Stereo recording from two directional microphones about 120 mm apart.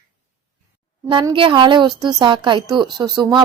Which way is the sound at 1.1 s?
40° right (ahead or behind).